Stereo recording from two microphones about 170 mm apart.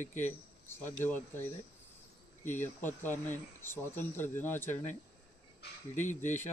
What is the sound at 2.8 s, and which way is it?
Speech, 10° left (ahead or behind).